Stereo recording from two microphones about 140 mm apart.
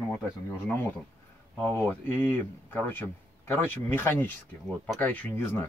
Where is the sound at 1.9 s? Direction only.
15° left (ahead or behind).